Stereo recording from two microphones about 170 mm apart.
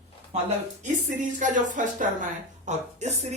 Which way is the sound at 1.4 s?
50° right (ahead or behind).